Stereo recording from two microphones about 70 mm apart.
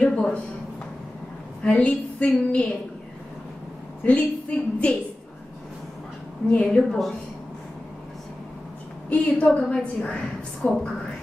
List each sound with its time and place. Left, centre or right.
0.0 s a woman's voice: centre
1.6 s a woman's voice: centre
4.0 s a woman's voice: centre
6.5 s a woman's voice: centre
9.1 s a woman's voice: centre